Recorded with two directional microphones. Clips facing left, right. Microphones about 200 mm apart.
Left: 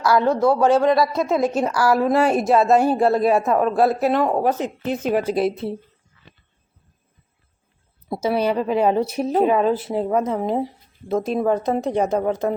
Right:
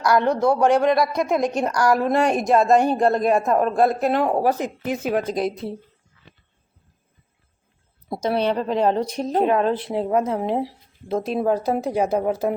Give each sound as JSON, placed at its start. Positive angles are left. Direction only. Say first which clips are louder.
{"t": 0.3, "sound": "speech", "louder": "left 2 dB", "side_deg": -20}
{"t": 1.3, "sound": "a woman's voice", "louder": "left 1 dB", "side_deg": 5}
{"t": 4.5, "sound": "speech", "louder": "left 1 dB", "side_deg": -10}
{"t": 5.1, "sound": "a woman's voice", "louder": "left 4 dB", "side_deg": 5}
{"t": 8.1, "sound": "a woman's voice", "louder": "left 1 dB", "side_deg": 5}